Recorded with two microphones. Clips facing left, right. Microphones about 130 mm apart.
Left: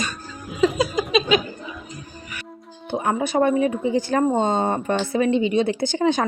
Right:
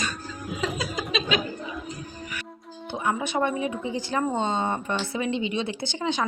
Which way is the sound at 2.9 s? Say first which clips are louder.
Left 5 dB; 45° left (ahead or behind).